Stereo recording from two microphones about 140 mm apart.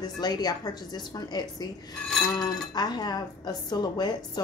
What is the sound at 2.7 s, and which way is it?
A woman's voice, 30° left (ahead or behind).